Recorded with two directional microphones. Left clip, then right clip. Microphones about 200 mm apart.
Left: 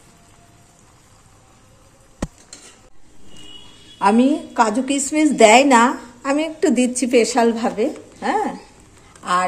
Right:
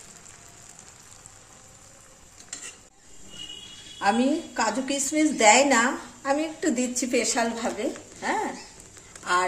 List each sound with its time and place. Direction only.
4.0 s a woman's voice: 45° left (ahead or behind)